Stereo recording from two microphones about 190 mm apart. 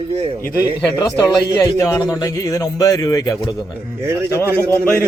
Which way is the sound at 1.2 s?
15° left (ahead or behind).